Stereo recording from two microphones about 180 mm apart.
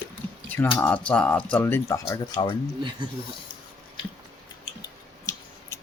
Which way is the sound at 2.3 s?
30° left (ahead or behind).